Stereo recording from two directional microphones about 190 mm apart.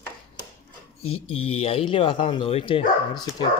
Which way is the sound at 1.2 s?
30° left (ahead or behind).